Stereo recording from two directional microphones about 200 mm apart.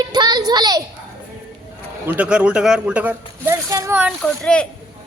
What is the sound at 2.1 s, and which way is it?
Speech, 5° right (ahead or behind).